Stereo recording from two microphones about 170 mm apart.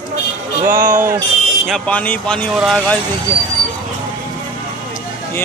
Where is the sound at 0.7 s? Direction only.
50° right (ahead or behind).